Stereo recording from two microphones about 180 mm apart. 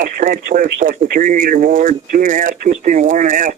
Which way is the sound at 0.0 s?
50° right (ahead or behind).